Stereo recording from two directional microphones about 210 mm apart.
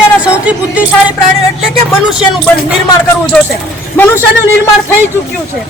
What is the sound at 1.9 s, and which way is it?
A man's voice, centre (ahead or behind).